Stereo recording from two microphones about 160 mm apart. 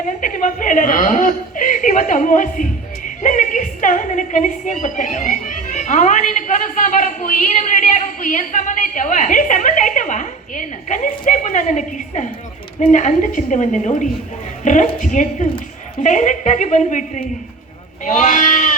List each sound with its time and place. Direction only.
0.2 s chuckle: 55° left (ahead or behind)
3.2 s a woman's voice: 50° left (ahead or behind)